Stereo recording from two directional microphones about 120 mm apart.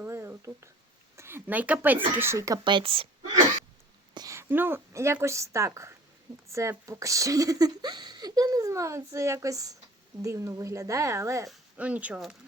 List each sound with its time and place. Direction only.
0.0 s a sound: 20° right (ahead or behind)
1.1 s speech: 20° right (ahead or behind)
2.6 s speech: 45° right (ahead or behind)
4.1 s a sound: 35° right (ahead or behind)
4.4 s speech: 20° right (ahead or behind)
11.8 s speech: 10° right (ahead or behind)